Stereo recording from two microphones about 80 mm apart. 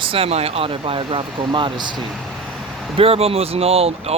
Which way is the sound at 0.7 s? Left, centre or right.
Right.